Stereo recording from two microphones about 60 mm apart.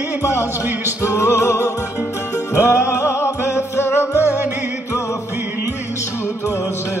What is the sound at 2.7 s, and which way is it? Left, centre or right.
Music, left.